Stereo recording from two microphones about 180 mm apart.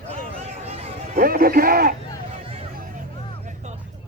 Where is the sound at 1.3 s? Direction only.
55° right (ahead or behind).